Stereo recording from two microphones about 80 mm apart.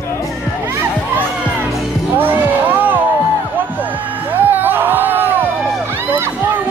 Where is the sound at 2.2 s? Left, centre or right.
Right.